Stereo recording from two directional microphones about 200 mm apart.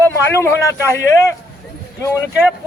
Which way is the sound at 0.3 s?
15° left (ahead or behind).